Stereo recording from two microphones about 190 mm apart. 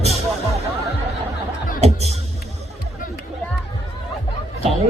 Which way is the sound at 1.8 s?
35° right (ahead or behind).